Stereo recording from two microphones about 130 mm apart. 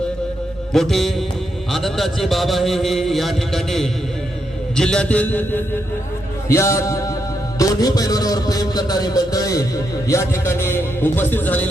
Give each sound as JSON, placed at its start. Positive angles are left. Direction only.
{"t": 0.7, "sound": "a man's voice", "side_deg": 0}